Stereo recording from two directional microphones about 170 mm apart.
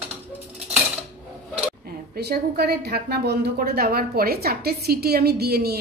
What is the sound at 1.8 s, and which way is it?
A woman's voice, 65° right (ahead or behind).